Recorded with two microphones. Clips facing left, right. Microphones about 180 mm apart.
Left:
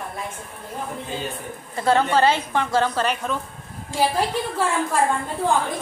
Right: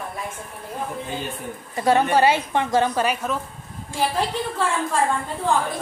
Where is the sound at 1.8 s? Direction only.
15° right (ahead or behind).